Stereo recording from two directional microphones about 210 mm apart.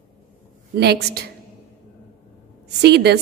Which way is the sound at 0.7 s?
50° right (ahead or behind).